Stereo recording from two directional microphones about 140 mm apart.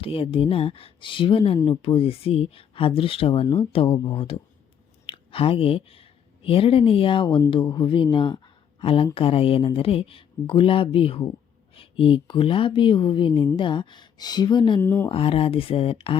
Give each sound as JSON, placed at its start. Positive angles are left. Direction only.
{"t": 0.0, "sound": "speech", "side_deg": 40}
{"t": 1.5, "sound": "speech", "side_deg": 25}
{"t": 1.8, "sound": "speech", "side_deg": 40}
{"t": 14.8, "sound": "speech", "side_deg": 20}
{"t": 15.1, "sound": "speech", "side_deg": 40}